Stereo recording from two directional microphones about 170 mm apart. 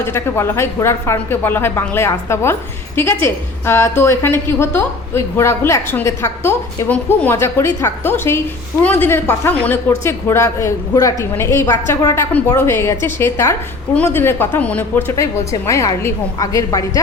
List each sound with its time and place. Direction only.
0.0 s a woman's voice: 15° left (ahead or behind)